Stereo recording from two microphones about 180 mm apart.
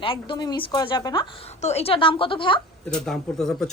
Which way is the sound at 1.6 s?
35° left (ahead or behind).